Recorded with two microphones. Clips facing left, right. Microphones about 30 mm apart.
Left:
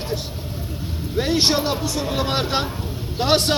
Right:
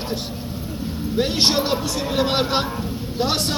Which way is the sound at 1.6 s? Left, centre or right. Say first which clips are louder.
Even; right.